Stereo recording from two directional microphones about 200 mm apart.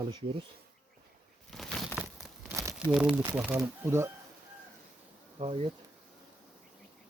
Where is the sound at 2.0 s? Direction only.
5° right (ahead or behind).